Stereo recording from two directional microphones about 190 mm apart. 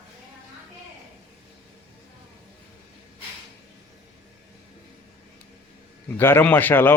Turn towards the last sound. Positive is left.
turn(degrees=10)  # may be behind; listen again after turning